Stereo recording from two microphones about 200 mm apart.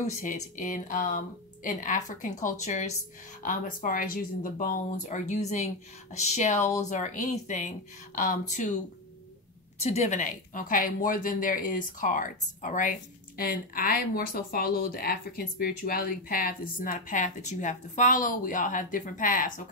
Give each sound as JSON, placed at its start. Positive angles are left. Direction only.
{"t": 0.0, "sound": "speech", "side_deg": 40}
{"t": 9.8, "sound": "speech", "side_deg": 30}